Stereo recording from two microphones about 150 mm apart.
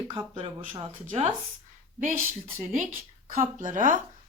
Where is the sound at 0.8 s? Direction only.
45° right (ahead or behind).